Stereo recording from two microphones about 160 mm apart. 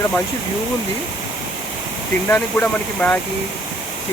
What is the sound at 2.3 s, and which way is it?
Speech, 10° left (ahead or behind).